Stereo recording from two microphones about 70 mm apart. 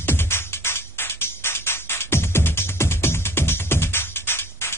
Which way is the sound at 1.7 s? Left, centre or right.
Left.